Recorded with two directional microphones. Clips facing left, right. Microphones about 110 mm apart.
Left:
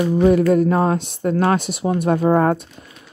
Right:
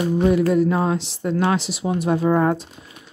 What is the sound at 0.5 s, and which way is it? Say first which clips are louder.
Speech: left 3 dB; 45° left (ahead or behind).